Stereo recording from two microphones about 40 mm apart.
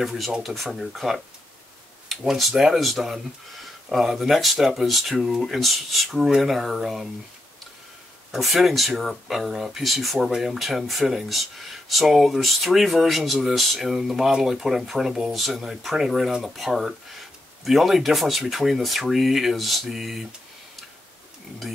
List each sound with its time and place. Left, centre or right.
0.7 s speech: centre
2.5 s speech: centre
2.8 s speech: centre
8.4 s speech: centre
15.3 s speech: centre
16.5 s speech: centre